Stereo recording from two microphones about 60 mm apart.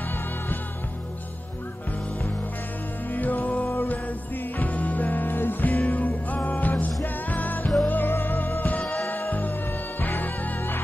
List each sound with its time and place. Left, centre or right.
3.1 s music: left